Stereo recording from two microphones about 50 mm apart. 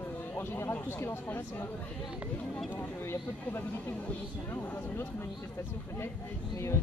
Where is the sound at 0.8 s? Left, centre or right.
Left.